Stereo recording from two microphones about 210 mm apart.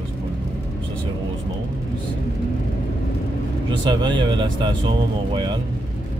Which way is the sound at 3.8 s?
20° right (ahead or behind).